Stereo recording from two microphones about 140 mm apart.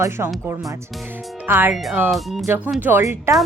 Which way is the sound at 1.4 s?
15° right (ahead or behind).